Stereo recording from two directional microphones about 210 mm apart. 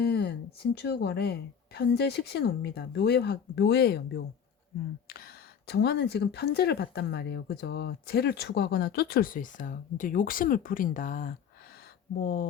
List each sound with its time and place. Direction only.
0.0 s speech: 50° left (ahead or behind)